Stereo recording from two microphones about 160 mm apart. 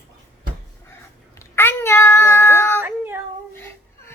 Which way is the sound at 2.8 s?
10° right (ahead or behind).